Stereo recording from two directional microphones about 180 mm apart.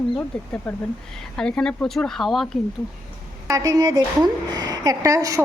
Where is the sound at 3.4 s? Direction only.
20° right (ahead or behind).